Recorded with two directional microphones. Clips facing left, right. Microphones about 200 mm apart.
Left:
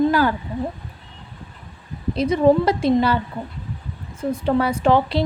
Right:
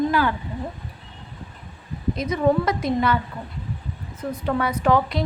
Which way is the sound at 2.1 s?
30° left (ahead or behind).